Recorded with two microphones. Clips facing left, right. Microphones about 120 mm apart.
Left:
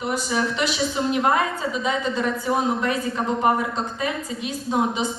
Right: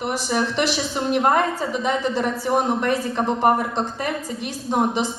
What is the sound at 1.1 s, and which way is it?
A woman's voice, 50° right (ahead or behind).